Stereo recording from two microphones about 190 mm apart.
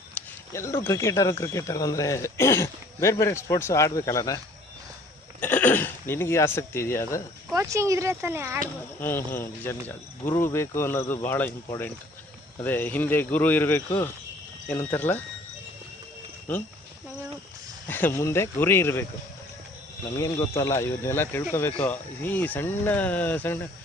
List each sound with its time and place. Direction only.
0.1 s speech: 15° left (ahead or behind)
5.4 s speech: 10° left (ahead or behind)
7.5 s speech: 15° right (ahead or behind)
9.0 s speech: 10° left (ahead or behind)
16.5 s speech: 10° left (ahead or behind)
17.8 s speech: 10° left (ahead or behind)
20.1 s speech: 15° left (ahead or behind)